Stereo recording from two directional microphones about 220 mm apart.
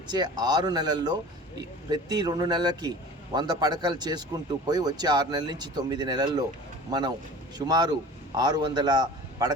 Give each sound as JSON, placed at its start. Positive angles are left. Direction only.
{"t": 0.1, "sound": "a man's voice", "side_deg": -20}